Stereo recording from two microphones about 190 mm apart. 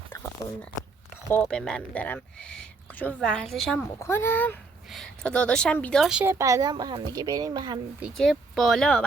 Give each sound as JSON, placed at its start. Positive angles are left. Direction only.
{"t": 0.1, "sound": "a sound", "side_deg": 10}
{"t": 1.3, "sound": "speech", "side_deg": 5}
{"t": 3.9, "sound": "speech", "side_deg": 15}
{"t": 6.4, "sound": "a woman's voice", "side_deg": -20}
{"t": 7.9, "sound": "speech", "side_deg": 0}